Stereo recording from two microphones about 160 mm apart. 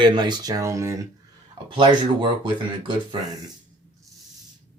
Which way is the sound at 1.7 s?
30° right (ahead or behind).